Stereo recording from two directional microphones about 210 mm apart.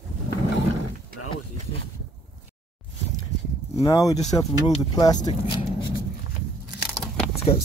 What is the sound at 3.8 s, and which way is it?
Speech, 15° left (ahead or behind).